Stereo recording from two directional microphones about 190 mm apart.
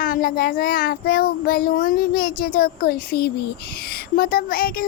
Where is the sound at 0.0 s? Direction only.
50° left (ahead or behind).